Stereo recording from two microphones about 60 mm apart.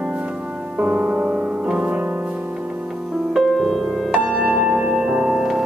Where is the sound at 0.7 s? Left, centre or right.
Right.